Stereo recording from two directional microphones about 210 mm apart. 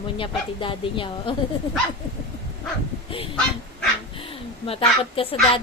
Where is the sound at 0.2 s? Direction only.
25° left (ahead or behind).